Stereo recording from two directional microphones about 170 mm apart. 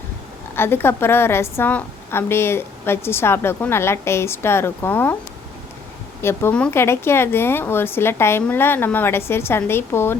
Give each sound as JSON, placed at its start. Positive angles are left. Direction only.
{"t": 0.5, "sound": "a woman's voice", "side_deg": 15}
{"t": 6.2, "sound": "a woman's voice", "side_deg": 10}